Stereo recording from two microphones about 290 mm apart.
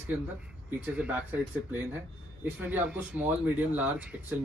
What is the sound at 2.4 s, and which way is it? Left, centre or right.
Speech, centre.